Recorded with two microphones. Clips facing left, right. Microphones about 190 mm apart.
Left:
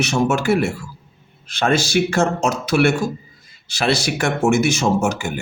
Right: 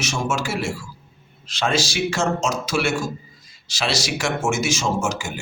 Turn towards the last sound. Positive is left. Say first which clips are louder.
# left 5 dB
turn(degrees=60)  # may be behind; listen again after turning